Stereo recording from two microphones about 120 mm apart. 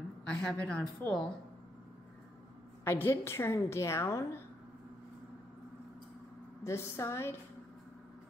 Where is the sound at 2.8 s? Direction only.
20° left (ahead or behind).